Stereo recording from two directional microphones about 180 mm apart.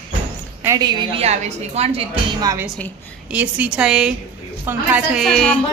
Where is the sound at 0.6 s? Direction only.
20° right (ahead or behind).